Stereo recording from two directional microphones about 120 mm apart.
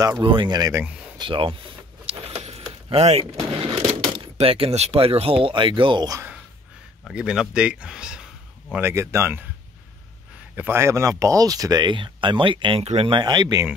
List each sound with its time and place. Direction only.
0.0 s speech: 35° right (ahead or behind)
1.1 s speech: 45° right (ahead or behind)
2.0 s vehicle: 60° right (ahead or behind)
3.5 s speech: 45° right (ahead or behind)
7.1 s speech: 5° right (ahead or behind)
8.7 s speech: 20° right (ahead or behind)
10.5 s speech: 20° right (ahead or behind); by 12.8 s 45° right (ahead or behind)
12.8 s speech: 60° right (ahead or behind)
13.1 s speech: 40° right (ahead or behind)